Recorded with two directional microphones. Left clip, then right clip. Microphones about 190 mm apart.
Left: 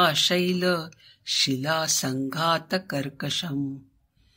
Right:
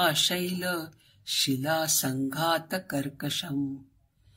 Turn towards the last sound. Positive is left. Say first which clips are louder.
# left 3 dB
turn(degrees=45)  # may be behind; listen again after turning